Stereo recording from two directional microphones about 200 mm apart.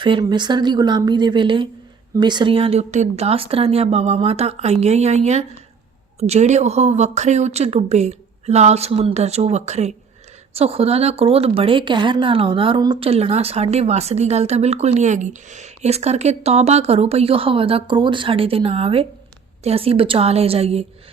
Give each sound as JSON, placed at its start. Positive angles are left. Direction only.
{"t": 0.0, "sound": "speech", "side_deg": -25}